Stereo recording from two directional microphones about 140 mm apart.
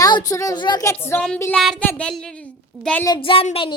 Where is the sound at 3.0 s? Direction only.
35° left (ahead or behind).